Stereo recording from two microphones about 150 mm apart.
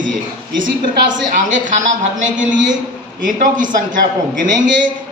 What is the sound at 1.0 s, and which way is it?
A woman's voice, 55° right (ahead or behind).